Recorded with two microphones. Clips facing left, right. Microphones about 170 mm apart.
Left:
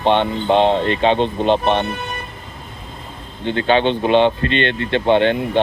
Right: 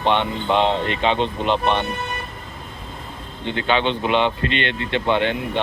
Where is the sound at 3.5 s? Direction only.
40° left (ahead or behind).